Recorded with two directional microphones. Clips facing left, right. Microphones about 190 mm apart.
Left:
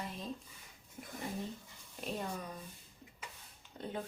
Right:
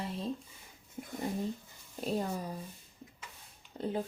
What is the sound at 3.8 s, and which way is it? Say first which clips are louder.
Speech: right 7 dB; 30° right (ahead or behind).